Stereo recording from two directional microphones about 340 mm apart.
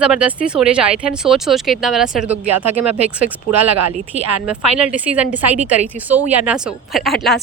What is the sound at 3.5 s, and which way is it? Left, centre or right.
Speech, right.